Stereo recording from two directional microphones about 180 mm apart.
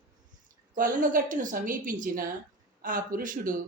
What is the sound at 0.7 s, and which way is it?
A man's voice, 50° right (ahead or behind).